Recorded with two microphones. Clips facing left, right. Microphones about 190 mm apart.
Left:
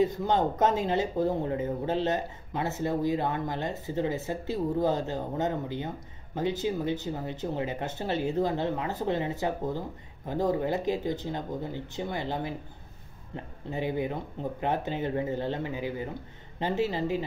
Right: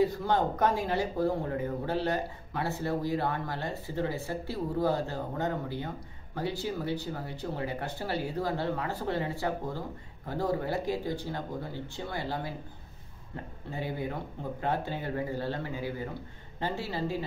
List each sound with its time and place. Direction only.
0.0 s speech: 20° left (ahead or behind)
13.7 s speech: 20° left (ahead or behind)